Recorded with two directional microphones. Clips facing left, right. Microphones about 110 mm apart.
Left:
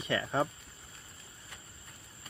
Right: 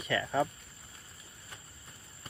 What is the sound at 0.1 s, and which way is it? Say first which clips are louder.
Speech: right 1 dB; 35° left (ahead or behind).